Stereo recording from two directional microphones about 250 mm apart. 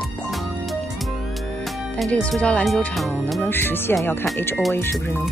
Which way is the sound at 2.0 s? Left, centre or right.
Centre.